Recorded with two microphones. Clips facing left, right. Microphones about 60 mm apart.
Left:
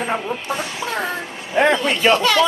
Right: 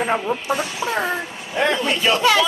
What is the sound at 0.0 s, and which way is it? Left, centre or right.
Speech, centre.